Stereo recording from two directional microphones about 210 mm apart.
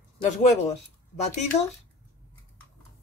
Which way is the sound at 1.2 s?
35° left (ahead or behind).